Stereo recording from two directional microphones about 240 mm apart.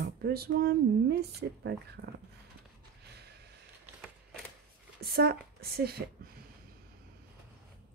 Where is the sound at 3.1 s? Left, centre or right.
Right.